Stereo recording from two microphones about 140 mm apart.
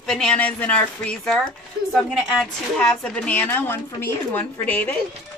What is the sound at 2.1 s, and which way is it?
Speech, 5° right (ahead or behind).